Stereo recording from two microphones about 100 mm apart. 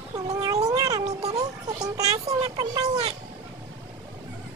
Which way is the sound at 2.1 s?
90° right.